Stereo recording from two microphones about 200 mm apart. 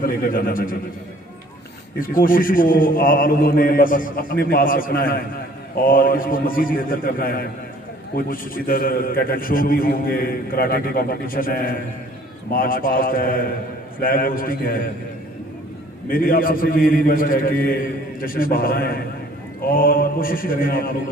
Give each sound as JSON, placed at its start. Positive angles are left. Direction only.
{"t": 0.0, "sound": "a man's voice", "side_deg": 45}
{"t": 2.0, "sound": "a man's voice", "side_deg": 45}
{"t": 16.0, "sound": "a man's voice", "side_deg": 45}